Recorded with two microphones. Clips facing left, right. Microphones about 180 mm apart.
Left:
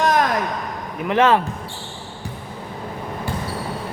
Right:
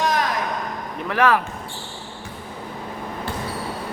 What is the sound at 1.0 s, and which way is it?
Speech, 25° left (ahead or behind).